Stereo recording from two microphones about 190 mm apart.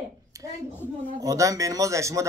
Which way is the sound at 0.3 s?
20° right (ahead or behind).